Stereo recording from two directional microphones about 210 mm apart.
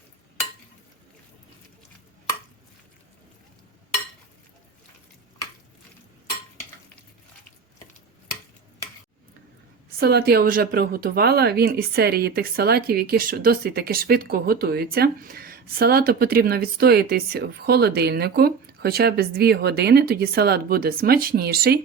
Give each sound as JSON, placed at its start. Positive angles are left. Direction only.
{"t": 10.0, "sound": "speech", "side_deg": -50}